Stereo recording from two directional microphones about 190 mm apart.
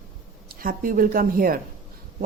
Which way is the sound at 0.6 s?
45° right (ahead or behind).